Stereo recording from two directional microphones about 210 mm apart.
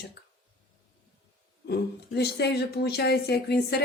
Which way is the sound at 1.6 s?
50° left (ahead or behind).